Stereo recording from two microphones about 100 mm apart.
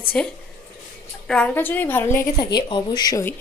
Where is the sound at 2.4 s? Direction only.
45° left (ahead or behind).